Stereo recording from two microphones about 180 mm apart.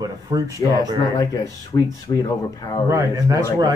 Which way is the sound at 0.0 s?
20° right (ahead or behind).